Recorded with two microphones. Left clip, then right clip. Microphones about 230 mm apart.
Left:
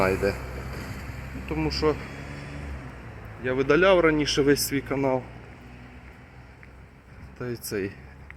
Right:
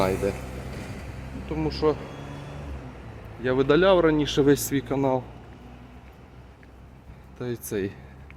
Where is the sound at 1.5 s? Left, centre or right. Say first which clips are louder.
Right 1 dB; centre.